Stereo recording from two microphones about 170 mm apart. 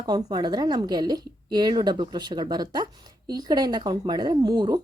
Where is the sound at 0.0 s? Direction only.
25° right (ahead or behind).